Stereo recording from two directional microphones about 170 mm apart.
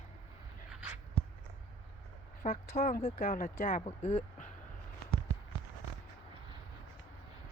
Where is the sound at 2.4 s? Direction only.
45° left (ahead or behind).